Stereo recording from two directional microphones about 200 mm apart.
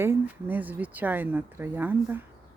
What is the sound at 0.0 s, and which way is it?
A woman's voice, 10° right (ahead or behind).